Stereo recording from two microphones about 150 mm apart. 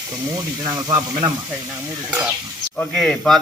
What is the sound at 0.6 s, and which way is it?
Speech, 25° right (ahead or behind).